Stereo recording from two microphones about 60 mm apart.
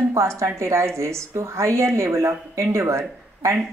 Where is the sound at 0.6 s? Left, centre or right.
Right.